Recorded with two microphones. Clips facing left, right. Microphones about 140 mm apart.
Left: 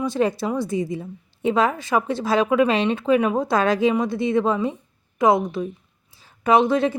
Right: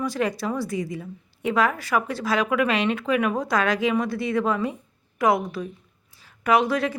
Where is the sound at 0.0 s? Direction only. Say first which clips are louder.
Left 4 dB; 25° left (ahead or behind).